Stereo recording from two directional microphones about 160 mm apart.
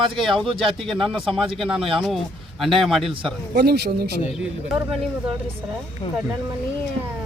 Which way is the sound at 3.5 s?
80° right.